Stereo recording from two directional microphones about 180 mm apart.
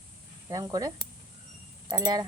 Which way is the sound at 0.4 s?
20° right (ahead or behind).